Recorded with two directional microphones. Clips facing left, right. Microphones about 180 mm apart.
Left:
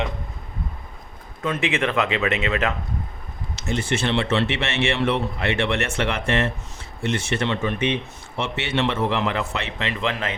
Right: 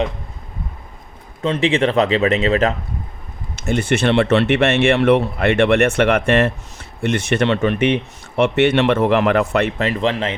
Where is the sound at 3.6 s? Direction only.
60° right (ahead or behind); by 10.4 s 30° right (ahead or behind).